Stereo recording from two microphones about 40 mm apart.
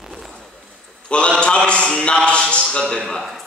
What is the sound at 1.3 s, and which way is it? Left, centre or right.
A man's voice, centre.